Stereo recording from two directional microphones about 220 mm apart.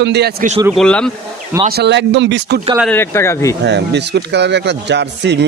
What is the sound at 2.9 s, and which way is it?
Speech, 10° left (ahead or behind).